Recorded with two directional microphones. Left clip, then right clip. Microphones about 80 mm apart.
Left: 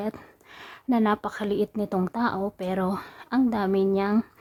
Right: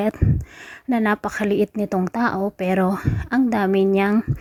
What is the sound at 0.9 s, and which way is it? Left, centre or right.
A woman's voice, right.